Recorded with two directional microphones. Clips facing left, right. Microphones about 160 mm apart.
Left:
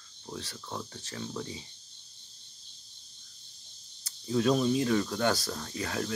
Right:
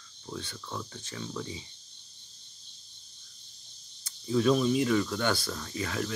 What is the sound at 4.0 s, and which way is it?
Speech, 35° left (ahead or behind).